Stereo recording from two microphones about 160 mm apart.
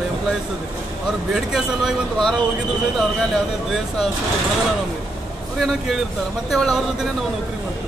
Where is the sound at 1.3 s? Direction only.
Centre (ahead or behind).